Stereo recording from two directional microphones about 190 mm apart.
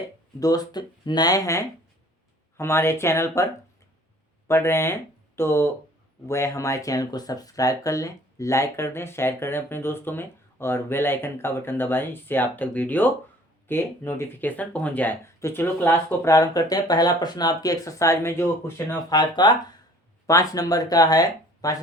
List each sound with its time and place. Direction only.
0.3 s speech: 20° left (ahead or behind)